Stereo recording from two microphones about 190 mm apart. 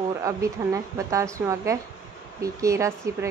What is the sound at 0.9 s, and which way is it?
Speech, 15° right (ahead or behind).